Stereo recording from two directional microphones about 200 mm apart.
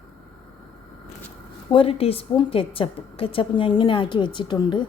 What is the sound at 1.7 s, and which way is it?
A woman's voice, 30° left (ahead or behind).